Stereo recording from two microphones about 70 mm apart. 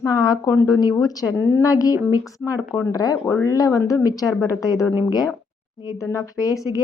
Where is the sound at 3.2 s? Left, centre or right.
Left.